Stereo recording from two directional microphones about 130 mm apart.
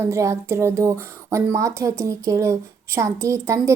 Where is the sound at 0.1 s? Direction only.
25° right (ahead or behind).